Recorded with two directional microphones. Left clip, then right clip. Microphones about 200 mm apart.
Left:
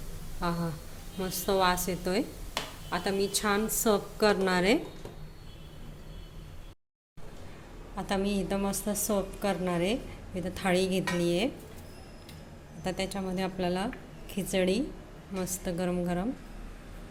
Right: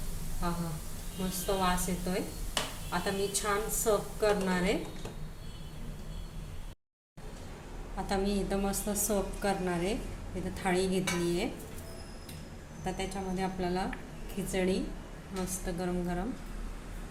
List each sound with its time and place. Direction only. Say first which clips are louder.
0.4 s a woman's voice: left 4 dB; 60° left (ahead or behind)
7.9 s a woman's voice: left 1 dB; 35° left (ahead or behind)
12.8 s a woman's voice: left 3 dB; 50° left (ahead or behind)